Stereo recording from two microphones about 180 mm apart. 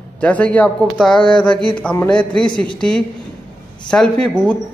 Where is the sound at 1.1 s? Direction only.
25° left (ahead or behind).